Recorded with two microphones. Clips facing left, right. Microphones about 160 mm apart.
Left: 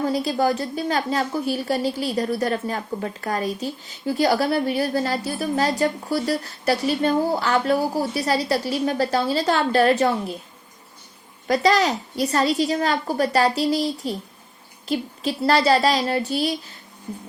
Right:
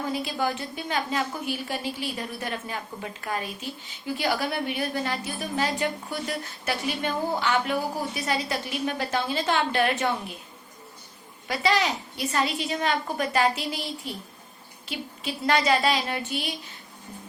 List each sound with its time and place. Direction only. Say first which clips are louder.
0.1 s a woman's voice: left 7 dB; 35° left (ahead or behind)
11.4 s a woman's voice: left 6 dB; 40° left (ahead or behind)